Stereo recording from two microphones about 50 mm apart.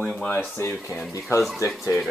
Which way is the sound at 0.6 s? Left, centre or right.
Left.